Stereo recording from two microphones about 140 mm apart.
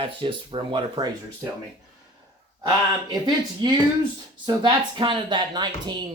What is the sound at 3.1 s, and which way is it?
Speech, 30° right (ahead or behind).